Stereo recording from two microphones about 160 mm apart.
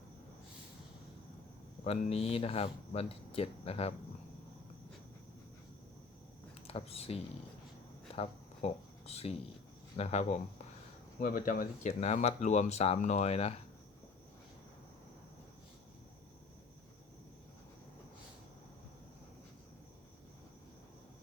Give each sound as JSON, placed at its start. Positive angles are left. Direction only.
{"t": 1.8, "sound": "speech", "side_deg": 40}
{"t": 6.7, "sound": "speech", "side_deg": 40}
{"t": 8.1, "sound": "a sound", "side_deg": 40}
{"t": 10.0, "sound": "speech", "side_deg": 40}
{"t": 11.2, "sound": "speech", "side_deg": 60}